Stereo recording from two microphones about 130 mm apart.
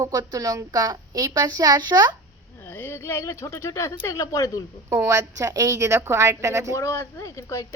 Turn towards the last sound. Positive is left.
turn(degrees=25)  # may be behind; listen again after turning